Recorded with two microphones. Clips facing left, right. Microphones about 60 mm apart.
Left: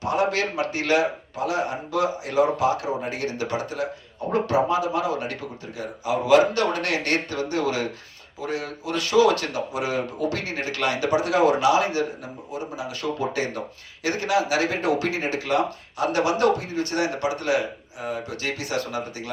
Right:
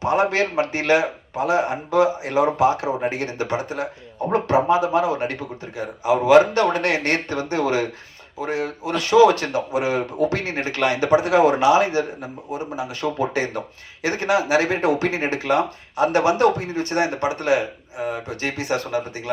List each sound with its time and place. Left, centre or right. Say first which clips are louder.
0.0 s speech: right 4 dB; right